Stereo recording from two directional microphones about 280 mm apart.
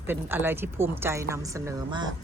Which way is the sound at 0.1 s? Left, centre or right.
Centre.